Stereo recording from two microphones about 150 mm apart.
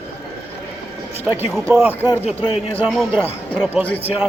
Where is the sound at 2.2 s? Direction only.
40° left (ahead or behind).